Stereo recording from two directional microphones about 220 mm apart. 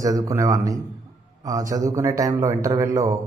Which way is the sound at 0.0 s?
15° right (ahead or behind).